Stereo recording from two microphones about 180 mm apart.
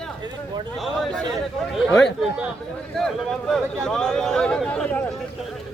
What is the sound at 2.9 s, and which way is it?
Speech, centre (ahead or behind).